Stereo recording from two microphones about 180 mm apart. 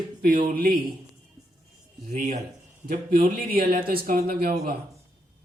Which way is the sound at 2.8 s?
55° right (ahead or behind).